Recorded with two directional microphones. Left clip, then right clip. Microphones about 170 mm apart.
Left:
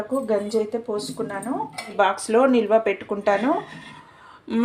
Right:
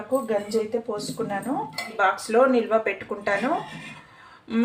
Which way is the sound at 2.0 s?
35° left (ahead or behind).